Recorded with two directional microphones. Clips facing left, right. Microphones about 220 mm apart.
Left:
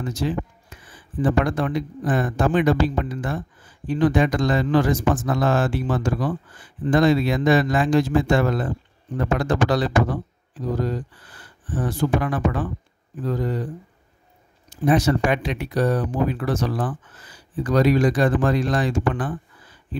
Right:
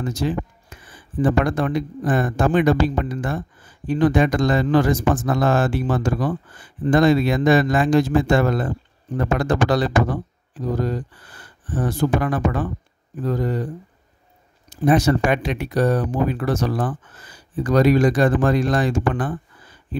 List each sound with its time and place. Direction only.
0.1 s a sound: 45° right (ahead or behind)
1.2 s speech: 45° right (ahead or behind)
11.7 s speech: 40° right (ahead or behind)
14.9 s speech: 45° right (ahead or behind)